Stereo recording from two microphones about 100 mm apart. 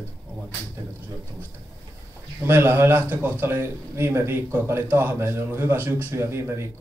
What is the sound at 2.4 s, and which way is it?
A man's voice, 25° right (ahead or behind).